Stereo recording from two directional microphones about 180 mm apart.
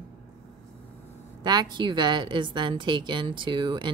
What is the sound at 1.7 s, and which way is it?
Speech, 25° right (ahead or behind).